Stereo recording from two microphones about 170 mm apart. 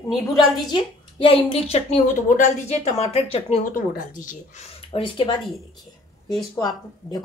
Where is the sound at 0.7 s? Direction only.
30° left (ahead or behind).